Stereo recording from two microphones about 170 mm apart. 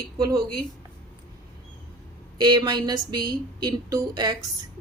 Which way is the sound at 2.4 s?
25° right (ahead or behind).